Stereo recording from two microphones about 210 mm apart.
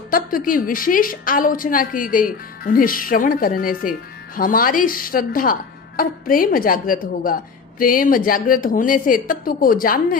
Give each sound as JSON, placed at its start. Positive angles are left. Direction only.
{"t": 0.1, "sound": "a woman's voice", "side_deg": 40}